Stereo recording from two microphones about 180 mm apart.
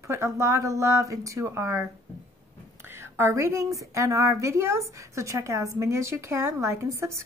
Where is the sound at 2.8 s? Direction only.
15° right (ahead or behind).